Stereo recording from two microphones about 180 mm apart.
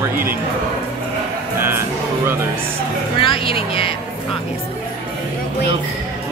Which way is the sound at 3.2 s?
30° left (ahead or behind).